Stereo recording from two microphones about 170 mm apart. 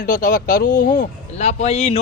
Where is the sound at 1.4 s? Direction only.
40° left (ahead or behind).